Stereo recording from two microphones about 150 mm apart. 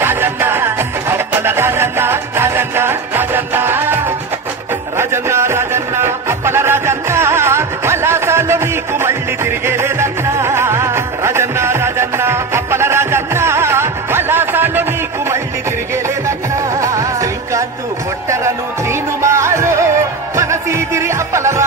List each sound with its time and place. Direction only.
0.0 s music: 15° right (ahead or behind)
16.8 s music: 20° right (ahead or behind)